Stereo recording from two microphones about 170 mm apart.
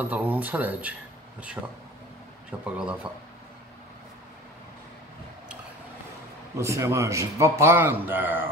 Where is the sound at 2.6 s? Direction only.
5° right (ahead or behind).